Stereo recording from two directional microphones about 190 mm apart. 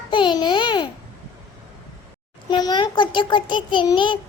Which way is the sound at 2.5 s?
25° left (ahead or behind).